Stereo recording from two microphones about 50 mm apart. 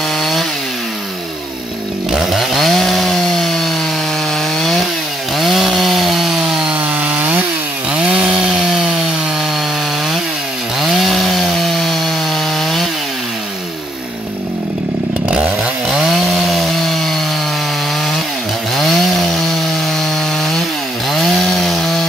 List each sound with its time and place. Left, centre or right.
0.2 s chainsaw: centre
2.1 s chainsaw: centre
7.0 s chainsaw: right
7.9 s chainsaw: right
10.8 s chainsaw: centre
16.1 s chainsaw: centre
18.8 s chainsaw: centre
21.1 s chainsaw: centre